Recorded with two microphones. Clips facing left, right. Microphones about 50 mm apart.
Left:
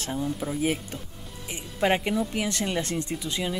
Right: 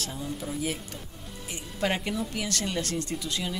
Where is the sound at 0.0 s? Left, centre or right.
Left.